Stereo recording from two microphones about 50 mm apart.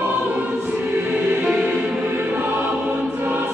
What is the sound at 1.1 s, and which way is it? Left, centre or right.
Choir, right.